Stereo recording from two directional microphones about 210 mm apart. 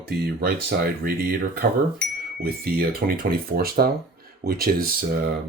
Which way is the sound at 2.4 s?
45° right (ahead or behind).